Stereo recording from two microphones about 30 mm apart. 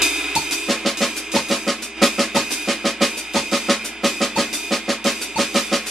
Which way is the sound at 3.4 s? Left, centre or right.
Centre.